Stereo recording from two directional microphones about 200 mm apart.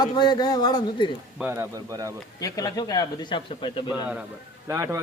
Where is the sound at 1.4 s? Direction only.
10° right (ahead or behind).